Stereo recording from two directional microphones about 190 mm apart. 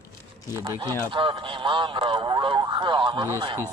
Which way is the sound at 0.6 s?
20° right (ahead or behind).